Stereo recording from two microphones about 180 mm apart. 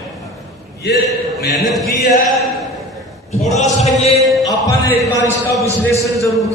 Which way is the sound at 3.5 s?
40° left (ahead or behind).